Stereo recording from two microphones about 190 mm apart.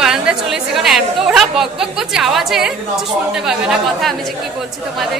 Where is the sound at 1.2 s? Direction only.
Centre (ahead or behind).